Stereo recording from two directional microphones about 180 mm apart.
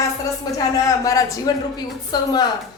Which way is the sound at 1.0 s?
20° left (ahead or behind).